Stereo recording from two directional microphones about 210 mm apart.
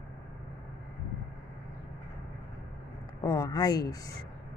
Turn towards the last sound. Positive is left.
turn(degrees=20)  # may be behind; listen again after turning